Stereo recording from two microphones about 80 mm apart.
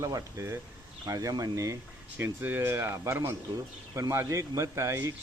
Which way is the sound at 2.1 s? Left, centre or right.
Right.